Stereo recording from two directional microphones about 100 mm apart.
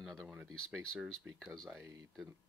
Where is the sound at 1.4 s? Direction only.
Centre (ahead or behind).